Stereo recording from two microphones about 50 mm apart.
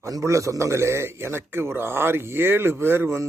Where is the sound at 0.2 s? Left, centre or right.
Right.